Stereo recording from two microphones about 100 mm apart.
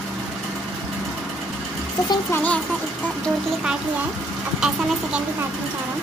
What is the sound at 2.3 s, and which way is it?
Speech, 15° left (ahead or behind).